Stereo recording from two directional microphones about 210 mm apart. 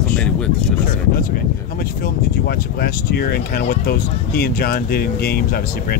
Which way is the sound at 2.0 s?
45° left (ahead or behind).